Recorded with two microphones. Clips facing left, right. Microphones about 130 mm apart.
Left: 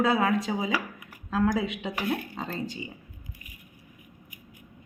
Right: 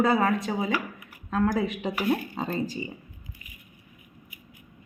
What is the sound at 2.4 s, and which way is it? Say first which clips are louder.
Speech: right 4 dB; 15° right (ahead or behind).